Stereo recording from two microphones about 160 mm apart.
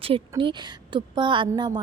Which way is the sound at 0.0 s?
35° right (ahead or behind).